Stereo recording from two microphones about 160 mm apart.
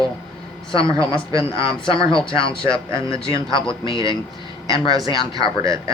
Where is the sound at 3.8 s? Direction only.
25° right (ahead or behind).